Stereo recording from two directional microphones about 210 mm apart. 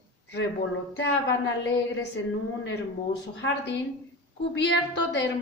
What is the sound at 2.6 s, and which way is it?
A woman's voice, 60° left (ahead or behind).